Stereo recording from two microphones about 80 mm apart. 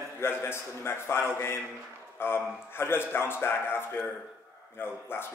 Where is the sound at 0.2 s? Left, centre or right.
Left.